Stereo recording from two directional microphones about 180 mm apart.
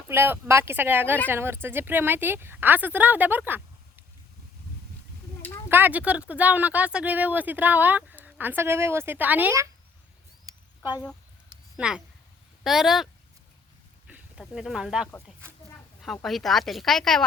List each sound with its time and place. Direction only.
0.1 s speech: 15° right (ahead or behind)
5.6 s speech: 10° right (ahead or behind)
10.5 s a sound: 20° right (ahead or behind)
11.8 s speech: 5° right (ahead or behind)
14.1 s a sound: 10° right (ahead or behind)
14.5 s speech: centre (ahead or behind)
16.2 s speech: centre (ahead or behind)